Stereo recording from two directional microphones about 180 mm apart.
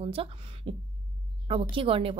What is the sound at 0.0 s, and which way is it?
A woman's voice, 30° right (ahead or behind).